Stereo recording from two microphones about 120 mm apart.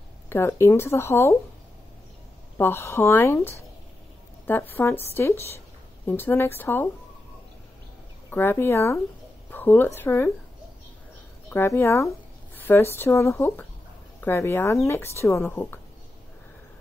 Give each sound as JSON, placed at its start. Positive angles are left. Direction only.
{"t": 0.3, "sound": "a woman's voice", "side_deg": 20}
{"t": 2.5, "sound": "a woman's voice", "side_deg": 20}
{"t": 8.3, "sound": "a woman's voice", "side_deg": 20}
{"t": 11.5, "sound": "a woman's voice", "side_deg": 20}